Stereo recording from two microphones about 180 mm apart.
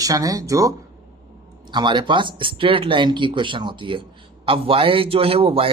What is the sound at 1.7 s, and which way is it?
A man's voice, 25° right (ahead or behind).